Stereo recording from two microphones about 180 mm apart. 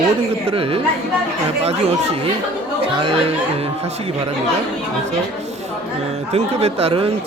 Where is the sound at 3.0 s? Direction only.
30° right (ahead or behind).